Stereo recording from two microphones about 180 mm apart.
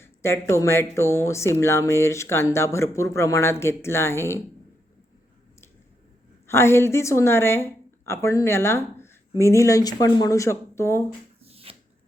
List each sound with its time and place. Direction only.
0.0 s speech: 15° left (ahead or behind)
6.5 s speech: 15° left (ahead or behind)
11.4 s shuffling cards: 35° right (ahead or behind)